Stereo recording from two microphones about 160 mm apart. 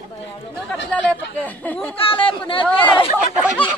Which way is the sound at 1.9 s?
35° left (ahead or behind).